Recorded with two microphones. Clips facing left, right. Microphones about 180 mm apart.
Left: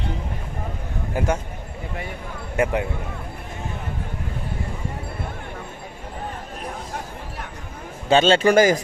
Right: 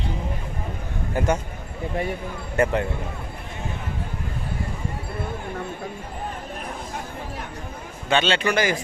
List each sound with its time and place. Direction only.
1.2 s speech: 10° left (ahead or behind)
2.6 s speech: 10° left (ahead or behind)
8.1 s a man's voice: 40° left (ahead or behind)